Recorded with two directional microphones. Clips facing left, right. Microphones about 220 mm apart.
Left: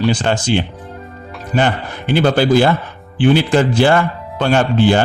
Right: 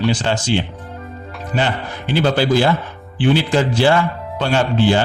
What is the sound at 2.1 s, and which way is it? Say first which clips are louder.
A man's voice: left 3 dB; 50° left (ahead or behind).